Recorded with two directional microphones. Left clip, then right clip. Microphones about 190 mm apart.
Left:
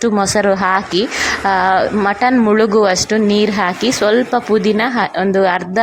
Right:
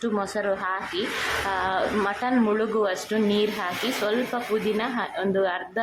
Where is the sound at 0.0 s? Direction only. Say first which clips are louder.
Left 13 dB; 25° left (ahead or behind).